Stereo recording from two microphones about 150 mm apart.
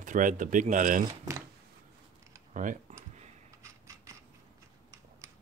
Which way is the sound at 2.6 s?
60° right (ahead or behind).